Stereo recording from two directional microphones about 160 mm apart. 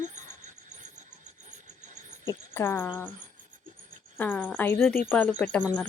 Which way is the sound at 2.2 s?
15° left (ahead or behind).